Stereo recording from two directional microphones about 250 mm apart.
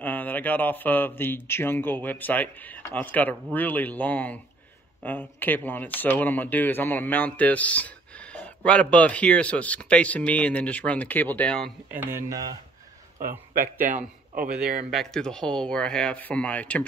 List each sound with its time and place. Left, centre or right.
0.0 s a man's voice: centre
11.9 s speech: centre
13.8 s a man's voice: right
14.9 s speech: centre